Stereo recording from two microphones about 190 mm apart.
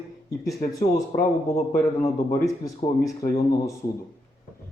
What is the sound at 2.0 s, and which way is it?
Speech, 15° left (ahead or behind).